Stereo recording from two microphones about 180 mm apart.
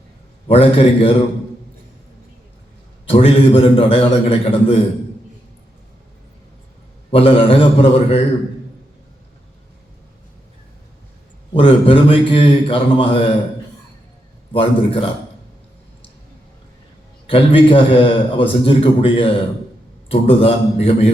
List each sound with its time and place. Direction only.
0.4 s a man's voice: 30° left (ahead or behind)
3.1 s a man's voice: 30° left (ahead or behind)
7.1 s a man's voice: 30° left (ahead or behind)
11.5 s a man's voice: 30° left (ahead or behind)
14.5 s a man's voice: 30° left (ahead or behind)
17.2 s a man's voice: 30° left (ahead or behind)